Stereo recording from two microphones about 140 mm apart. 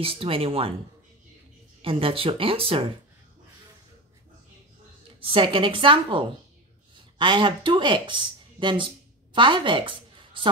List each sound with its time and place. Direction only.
0.0 s speech: 40° right (ahead or behind)
1.8 s speech: 40° right (ahead or behind)
5.2 s a woman's voice: 35° right (ahead or behind)